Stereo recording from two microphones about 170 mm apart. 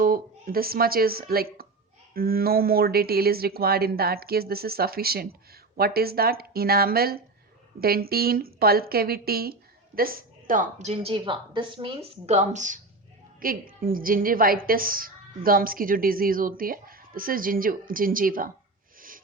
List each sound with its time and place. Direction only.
0.0 s a woman's voice: 60° right (ahead or behind)
13.4 s a woman's voice: 60° right (ahead or behind)
18.9 s a sound: 55° right (ahead or behind)